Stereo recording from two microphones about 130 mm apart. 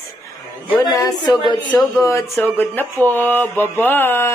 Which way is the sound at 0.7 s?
30° left (ahead or behind).